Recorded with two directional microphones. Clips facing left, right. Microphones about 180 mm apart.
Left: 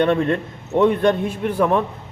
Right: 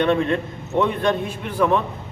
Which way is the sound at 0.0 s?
50° left (ahead or behind).